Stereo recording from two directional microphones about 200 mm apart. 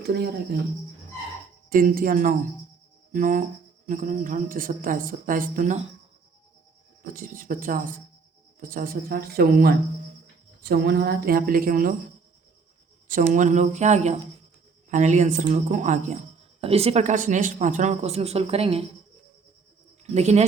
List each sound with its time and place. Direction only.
0.0 s a woman's voice: 50° right (ahead or behind)
1.7 s a woman's voice: 45° right (ahead or behind)
7.0 s a woman's voice: 45° right (ahead or behind)
13.1 s speech: 40° right (ahead or behind)
20.1 s speech: 35° right (ahead or behind)